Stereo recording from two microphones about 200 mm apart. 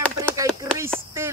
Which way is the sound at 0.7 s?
20° right (ahead or behind).